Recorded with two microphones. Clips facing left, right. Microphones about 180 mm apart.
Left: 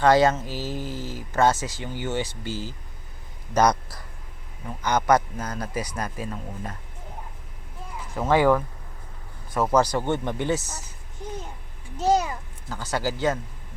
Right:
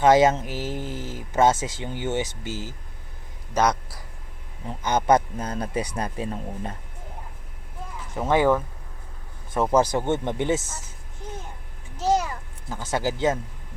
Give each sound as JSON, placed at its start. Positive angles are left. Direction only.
{"t": 0.0, "sound": "speech", "side_deg": -20}
{"t": 3.5, "sound": "a man's voice", "side_deg": -5}
{"t": 4.6, "sound": "speech", "side_deg": -25}
{"t": 8.3, "sound": "speech", "side_deg": -20}
{"t": 9.9, "sound": "speech", "side_deg": -20}
{"t": 11.9, "sound": "a child's voice", "side_deg": 10}
{"t": 12.6, "sound": "speech", "side_deg": -20}